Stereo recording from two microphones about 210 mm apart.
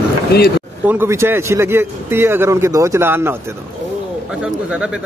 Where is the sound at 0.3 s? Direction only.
50° left (ahead or behind).